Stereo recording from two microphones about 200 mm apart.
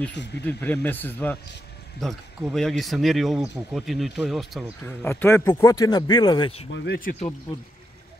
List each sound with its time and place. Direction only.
0.4 s speech: 10° left (ahead or behind)
5.0 s speech: 10° left (ahead or behind); by 6.7 s 25° left (ahead or behind)
6.7 s speech: 55° left (ahead or behind)